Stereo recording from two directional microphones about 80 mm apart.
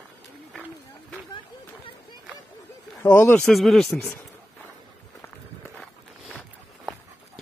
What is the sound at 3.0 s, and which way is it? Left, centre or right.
Speech, left.